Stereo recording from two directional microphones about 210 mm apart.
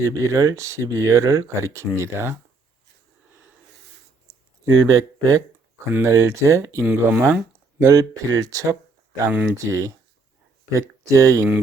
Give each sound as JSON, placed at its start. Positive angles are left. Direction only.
{"t": 0.0, "sound": "speech", "side_deg": -15}
{"t": 4.8, "sound": "speech", "side_deg": -15}